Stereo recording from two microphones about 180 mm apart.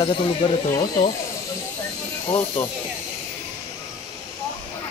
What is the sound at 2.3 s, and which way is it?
Speech, 15° left (ahead or behind).